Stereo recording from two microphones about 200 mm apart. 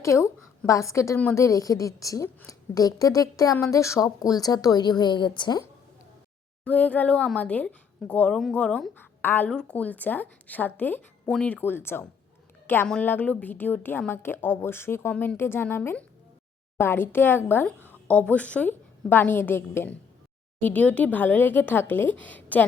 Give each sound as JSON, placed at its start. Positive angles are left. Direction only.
{"t": 0.0, "sound": "a woman's voice", "side_deg": 15}
{"t": 6.7, "sound": "a woman's voice", "side_deg": 5}